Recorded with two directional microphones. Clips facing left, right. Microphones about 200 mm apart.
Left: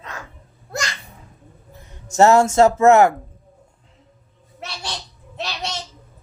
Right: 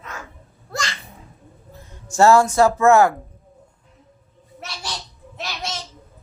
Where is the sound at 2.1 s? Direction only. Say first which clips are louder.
Left 1 dB; 20° left (ahead or behind).